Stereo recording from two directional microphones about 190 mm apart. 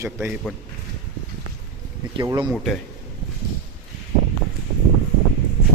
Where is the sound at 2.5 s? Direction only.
Centre (ahead or behind).